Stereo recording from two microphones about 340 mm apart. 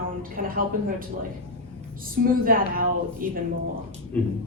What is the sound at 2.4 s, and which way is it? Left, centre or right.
Speech, right.